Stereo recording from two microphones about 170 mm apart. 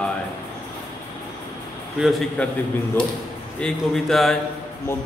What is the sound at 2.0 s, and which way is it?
Speech, centre (ahead or behind).